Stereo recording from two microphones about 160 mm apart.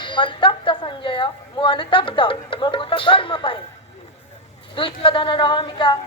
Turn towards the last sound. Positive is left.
turn(degrees=30)  # may be behind; listen again after turning